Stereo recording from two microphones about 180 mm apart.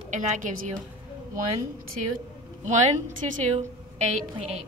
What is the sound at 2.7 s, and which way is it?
Speech, 40° right (ahead or behind).